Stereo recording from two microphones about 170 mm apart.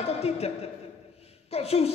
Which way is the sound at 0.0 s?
35° left (ahead or behind).